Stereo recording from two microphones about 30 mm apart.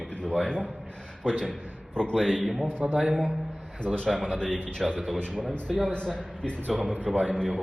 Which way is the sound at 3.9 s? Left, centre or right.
Left.